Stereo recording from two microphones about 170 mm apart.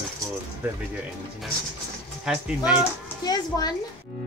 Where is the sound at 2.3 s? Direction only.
5° right (ahead or behind).